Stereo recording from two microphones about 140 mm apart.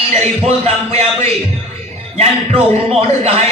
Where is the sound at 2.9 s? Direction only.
45° right (ahead or behind).